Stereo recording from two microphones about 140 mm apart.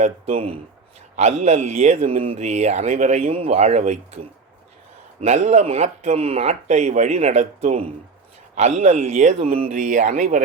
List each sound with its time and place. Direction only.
0.0 s speech: 45° right (ahead or behind)